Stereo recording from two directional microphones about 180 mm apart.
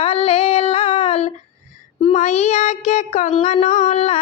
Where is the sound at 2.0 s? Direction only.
35° left (ahead or behind).